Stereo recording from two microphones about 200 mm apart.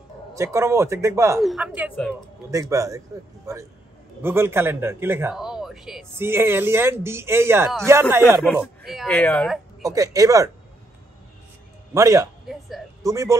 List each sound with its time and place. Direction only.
0.3 s speech: 15° right (ahead or behind)
1.4 s a woman's voice: centre (ahead or behind); by 3.0 s 15° right (ahead or behind)
4.2 s speech: 10° right (ahead or behind)
8.8 s speech: centre (ahead or behind)
9.8 s speech: 15° right (ahead or behind)
11.9 s speech: 15° right (ahead or behind)
12.4 s speech: centre (ahead or behind)
13.0 s speech: 15° right (ahead or behind)